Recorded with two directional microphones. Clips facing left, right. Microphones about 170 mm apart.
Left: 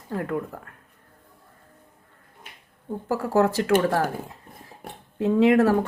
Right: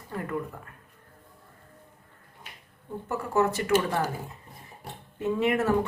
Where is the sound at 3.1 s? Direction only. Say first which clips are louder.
Left 4 dB; 90° left.